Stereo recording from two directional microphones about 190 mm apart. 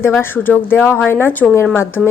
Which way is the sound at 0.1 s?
10° left (ahead or behind).